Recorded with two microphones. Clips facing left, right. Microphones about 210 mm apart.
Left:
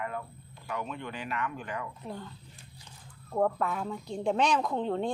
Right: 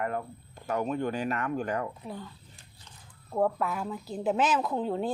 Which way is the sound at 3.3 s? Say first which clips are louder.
Right 1 dB; 5° right (ahead or behind).